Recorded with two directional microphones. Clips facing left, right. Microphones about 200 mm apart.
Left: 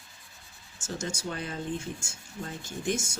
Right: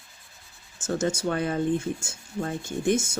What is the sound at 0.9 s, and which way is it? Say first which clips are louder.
Speech: right 9 dB; 55° right (ahead or behind).